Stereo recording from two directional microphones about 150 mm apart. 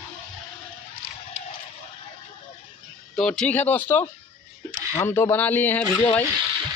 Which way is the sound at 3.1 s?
5° left (ahead or behind).